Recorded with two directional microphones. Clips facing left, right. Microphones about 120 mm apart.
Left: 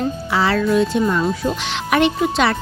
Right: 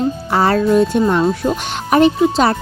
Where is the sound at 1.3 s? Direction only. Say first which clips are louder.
Right 3 dB; 40° right (ahead or behind).